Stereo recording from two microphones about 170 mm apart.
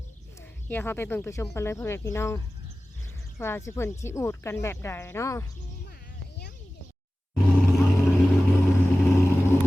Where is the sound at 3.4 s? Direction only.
15° left (ahead or behind).